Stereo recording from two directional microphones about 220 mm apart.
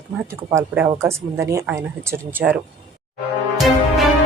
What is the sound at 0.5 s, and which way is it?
A woman's voice, 10° right (ahead or behind).